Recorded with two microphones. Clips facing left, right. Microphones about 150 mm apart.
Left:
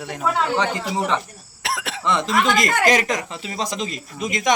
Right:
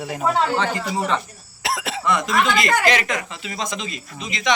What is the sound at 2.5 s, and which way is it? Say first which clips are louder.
Speech: left 2 dB; 40° left (ahead or behind).